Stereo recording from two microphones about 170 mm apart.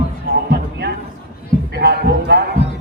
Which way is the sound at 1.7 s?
70° right (ahead or behind).